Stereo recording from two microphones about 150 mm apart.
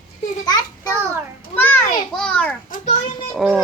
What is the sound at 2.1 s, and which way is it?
A child's voice, 5° left (ahead or behind).